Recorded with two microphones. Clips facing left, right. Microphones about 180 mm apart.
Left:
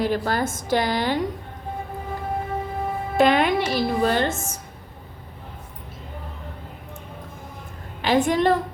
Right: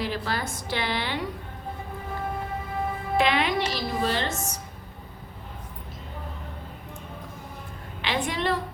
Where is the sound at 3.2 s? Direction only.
50° left (ahead or behind).